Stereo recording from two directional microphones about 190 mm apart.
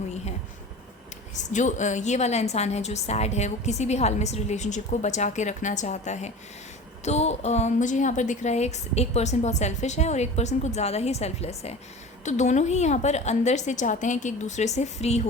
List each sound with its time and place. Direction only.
1.5 s a woman's voice: 40° left (ahead or behind)